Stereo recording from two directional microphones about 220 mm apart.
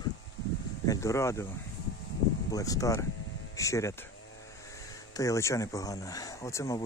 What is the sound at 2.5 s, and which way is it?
Speech, 15° left (ahead or behind).